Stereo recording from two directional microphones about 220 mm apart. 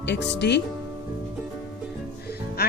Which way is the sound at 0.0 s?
50° left (ahead or behind).